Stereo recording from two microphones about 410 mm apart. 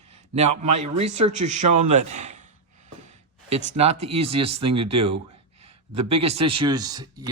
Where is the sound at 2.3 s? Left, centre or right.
Centre.